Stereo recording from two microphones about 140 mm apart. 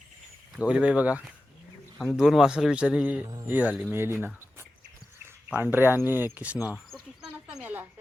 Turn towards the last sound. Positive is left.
turn(degrees=-10)  # may be behind; listen again after turning